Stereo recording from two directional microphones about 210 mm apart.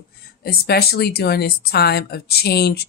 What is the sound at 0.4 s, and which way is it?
Speech, 45° left (ahead or behind).